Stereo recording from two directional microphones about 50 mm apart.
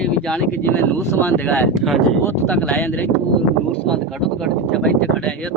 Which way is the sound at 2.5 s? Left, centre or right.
Left.